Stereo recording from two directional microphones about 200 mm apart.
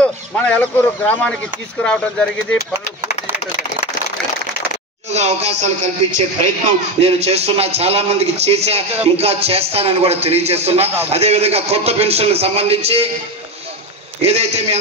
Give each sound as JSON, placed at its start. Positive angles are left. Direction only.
{"t": 0.0, "sound": "speech", "side_deg": 5}
{"t": 5.1, "sound": "speech", "side_deg": -35}
{"t": 7.0, "sound": "speech", "side_deg": -30}
{"t": 14.2, "sound": "speech", "side_deg": -30}